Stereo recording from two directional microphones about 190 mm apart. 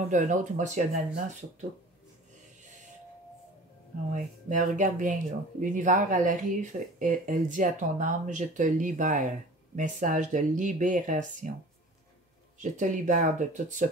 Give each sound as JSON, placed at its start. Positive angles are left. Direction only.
{"t": 0.1, "sound": "speech", "side_deg": -40}
{"t": 2.6, "sound": "a sound", "side_deg": -40}
{"t": 4.1, "sound": "speech", "side_deg": -40}
{"t": 12.7, "sound": "speech", "side_deg": -40}